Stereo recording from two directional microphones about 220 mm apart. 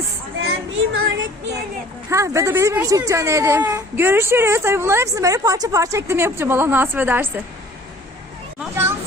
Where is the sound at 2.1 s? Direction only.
15° right (ahead or behind).